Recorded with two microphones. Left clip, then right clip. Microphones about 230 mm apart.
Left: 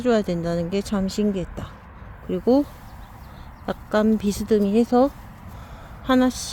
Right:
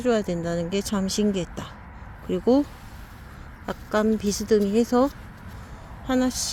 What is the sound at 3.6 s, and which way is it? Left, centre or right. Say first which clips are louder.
Speech: left 2 dB; centre.